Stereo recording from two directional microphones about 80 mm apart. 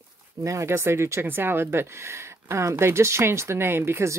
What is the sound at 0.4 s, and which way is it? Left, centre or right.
Speech, right.